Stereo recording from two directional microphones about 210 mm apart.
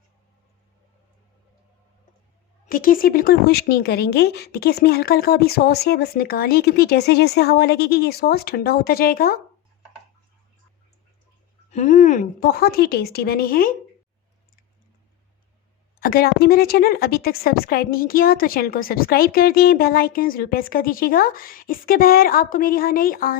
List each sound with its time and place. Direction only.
2.6 s a woman's voice: 40° left (ahead or behind)
11.7 s a woman's voice: 35° left (ahead or behind)
16.0 s a woman's voice: 45° left (ahead or behind)